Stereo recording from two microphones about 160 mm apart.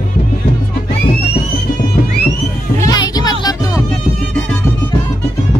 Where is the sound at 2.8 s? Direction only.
25° left (ahead or behind).